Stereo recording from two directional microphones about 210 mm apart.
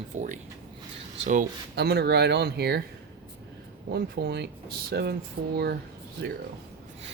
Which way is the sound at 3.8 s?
50° right (ahead or behind).